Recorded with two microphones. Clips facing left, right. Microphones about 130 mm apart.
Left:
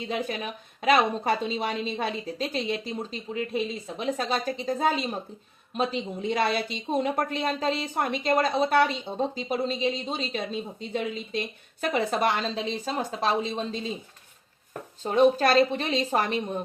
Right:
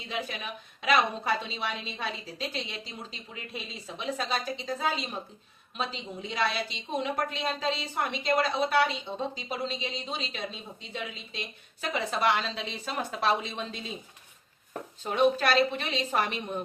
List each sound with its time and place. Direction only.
0.3 s a woman's voice: 45° left (ahead or behind)
15.0 s a woman's voice: 40° left (ahead or behind)